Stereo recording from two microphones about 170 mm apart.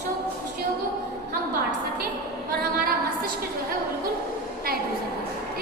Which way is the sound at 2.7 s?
60° right (ahead or behind).